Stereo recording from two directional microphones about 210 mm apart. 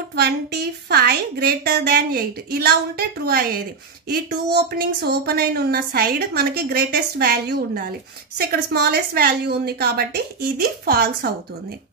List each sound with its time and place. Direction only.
0.1 s speech: 50° right (ahead or behind)